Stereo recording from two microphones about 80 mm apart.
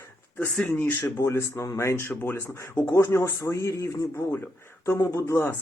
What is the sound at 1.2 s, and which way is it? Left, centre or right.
Speech, left.